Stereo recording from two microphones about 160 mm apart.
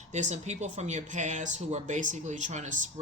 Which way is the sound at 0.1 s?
45° right (ahead or behind).